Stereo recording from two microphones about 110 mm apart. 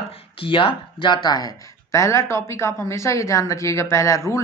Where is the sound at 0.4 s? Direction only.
50° left (ahead or behind).